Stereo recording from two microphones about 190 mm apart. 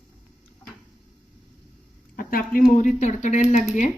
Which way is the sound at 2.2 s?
50° left (ahead or behind).